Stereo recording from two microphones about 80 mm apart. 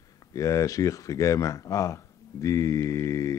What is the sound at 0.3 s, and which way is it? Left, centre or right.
A man's voice, left.